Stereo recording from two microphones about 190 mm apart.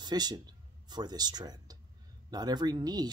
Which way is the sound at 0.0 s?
20° right (ahead or behind).